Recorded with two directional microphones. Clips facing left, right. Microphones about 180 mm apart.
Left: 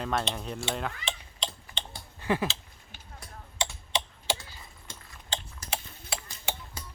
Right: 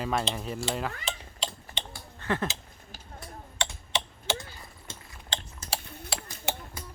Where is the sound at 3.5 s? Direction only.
15° left (ahead or behind).